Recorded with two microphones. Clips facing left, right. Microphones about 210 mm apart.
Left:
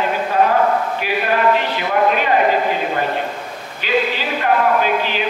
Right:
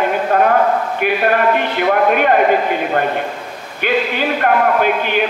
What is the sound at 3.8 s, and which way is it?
A man's voice, 55° right (ahead or behind).